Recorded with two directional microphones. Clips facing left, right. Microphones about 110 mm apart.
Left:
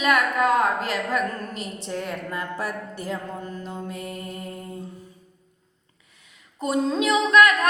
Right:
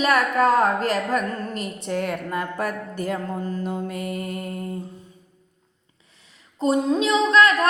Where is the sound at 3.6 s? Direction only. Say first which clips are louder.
Right 5 dB; 65° right (ahead or behind).